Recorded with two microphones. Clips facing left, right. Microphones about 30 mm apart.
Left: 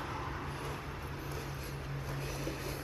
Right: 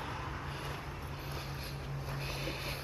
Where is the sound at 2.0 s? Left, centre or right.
Right.